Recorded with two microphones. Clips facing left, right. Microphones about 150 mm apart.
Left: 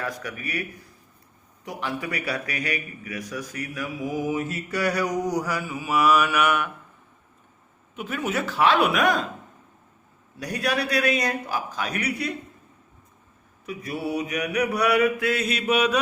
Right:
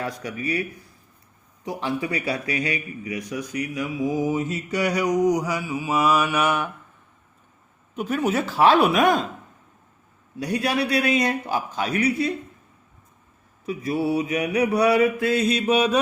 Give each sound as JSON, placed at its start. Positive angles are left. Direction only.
{"t": 0.0, "sound": "a man's voice", "side_deg": -25}
{"t": 1.6, "sound": "a man's voice", "side_deg": -25}
{"t": 7.9, "sound": "speech", "side_deg": -40}
{"t": 10.4, "sound": "a man's voice", "side_deg": -25}
{"t": 13.7, "sound": "a man's voice", "side_deg": -25}